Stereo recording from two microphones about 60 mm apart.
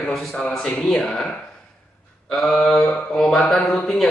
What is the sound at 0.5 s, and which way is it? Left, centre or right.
Speech, centre.